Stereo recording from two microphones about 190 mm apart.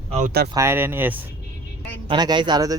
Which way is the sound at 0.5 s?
15° right (ahead or behind).